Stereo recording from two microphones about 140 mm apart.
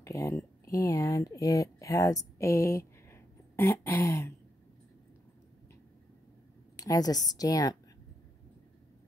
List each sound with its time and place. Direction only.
0.0 s speech: 20° left (ahead or behind)
6.8 s speech: 25° left (ahead or behind)